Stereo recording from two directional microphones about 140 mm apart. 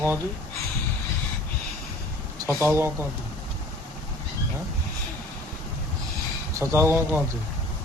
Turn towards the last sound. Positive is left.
turn(degrees=-15)  # may be behind; listen again after turning